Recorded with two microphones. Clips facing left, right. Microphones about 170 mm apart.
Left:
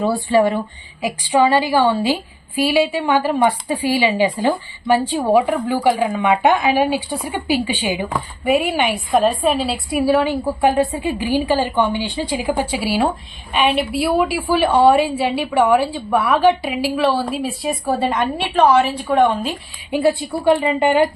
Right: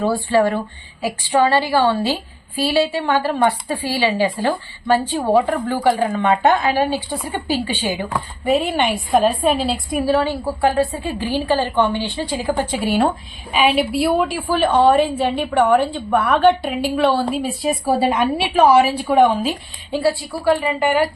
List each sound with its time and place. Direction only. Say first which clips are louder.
0.3 s a woman's voice: left 2 dB; 15° left (ahead or behind)
10.1 s a woman's voice: left 2 dB; 15° left (ahead or behind); by 19.5 s 5° right (ahead or behind)
19.9 s a woman's voice: left 2 dB; 20° left (ahead or behind)